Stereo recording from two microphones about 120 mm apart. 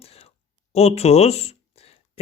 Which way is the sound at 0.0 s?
55° left (ahead or behind).